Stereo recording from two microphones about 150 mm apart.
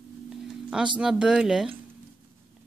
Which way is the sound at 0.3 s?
Centre (ahead or behind).